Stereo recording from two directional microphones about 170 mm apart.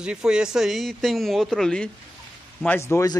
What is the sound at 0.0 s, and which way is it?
Speech, 5° right (ahead or behind).